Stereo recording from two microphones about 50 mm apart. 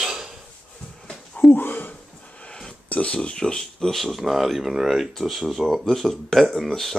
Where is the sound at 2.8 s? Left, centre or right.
Left.